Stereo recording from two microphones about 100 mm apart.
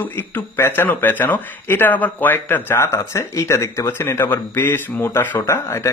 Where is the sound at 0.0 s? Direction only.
20° left (ahead or behind).